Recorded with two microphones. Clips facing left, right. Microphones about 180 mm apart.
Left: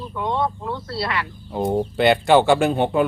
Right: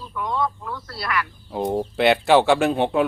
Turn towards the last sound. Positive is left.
turn(degrees=0)  # may be behind; listen again after turning